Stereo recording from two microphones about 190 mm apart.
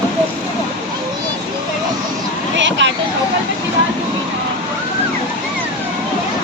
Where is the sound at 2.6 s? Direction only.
70° right (ahead or behind).